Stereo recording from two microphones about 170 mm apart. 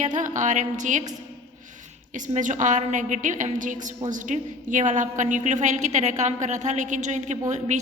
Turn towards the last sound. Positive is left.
turn(degrees=-45)  # may be behind; listen again after turning